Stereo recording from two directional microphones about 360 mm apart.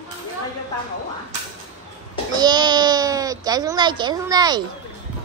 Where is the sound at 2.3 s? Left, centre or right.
Centre.